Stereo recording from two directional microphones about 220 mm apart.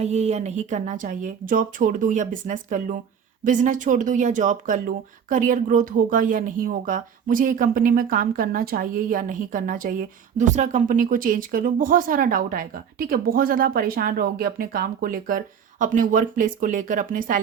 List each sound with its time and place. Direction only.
0.0 s speech: 30° right (ahead or behind)